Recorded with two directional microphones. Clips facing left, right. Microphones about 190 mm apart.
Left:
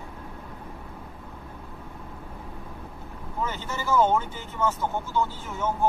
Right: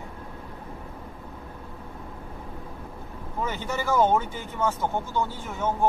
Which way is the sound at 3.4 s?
15° right (ahead or behind).